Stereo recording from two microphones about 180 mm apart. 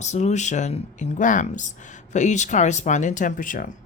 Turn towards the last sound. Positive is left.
turn(degrees=50)  # may be behind; listen again after turning